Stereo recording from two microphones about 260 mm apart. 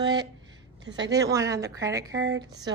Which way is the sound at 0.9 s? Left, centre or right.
Right.